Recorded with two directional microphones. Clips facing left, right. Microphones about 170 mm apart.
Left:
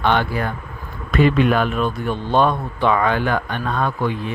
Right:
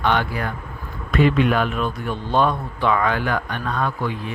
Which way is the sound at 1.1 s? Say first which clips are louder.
Left 2 dB; 40° left (ahead or behind).